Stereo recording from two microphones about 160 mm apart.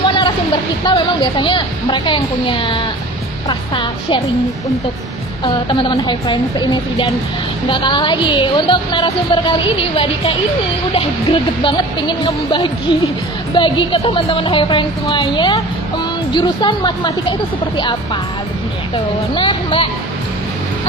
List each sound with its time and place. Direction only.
0.0 s a sound: 30° left (ahead or behind)
0.8 s a woman's voice: 30° left (ahead or behind)
5.4 s a woman's voice: 30° left (ahead or behind)
19.3 s speech: 30° left (ahead or behind)